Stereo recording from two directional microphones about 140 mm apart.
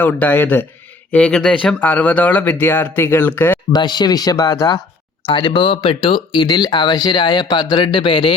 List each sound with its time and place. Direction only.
0.0 s speech: 15° left (ahead or behind)
3.7 s speech: 30° left (ahead or behind)
5.2 s speech: 35° left (ahead or behind)